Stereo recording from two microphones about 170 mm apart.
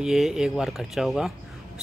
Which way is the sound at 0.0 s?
5° right (ahead or behind).